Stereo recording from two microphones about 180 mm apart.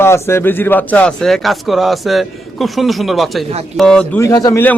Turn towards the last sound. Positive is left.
turn(degrees=15)  # may be behind; listen again after turning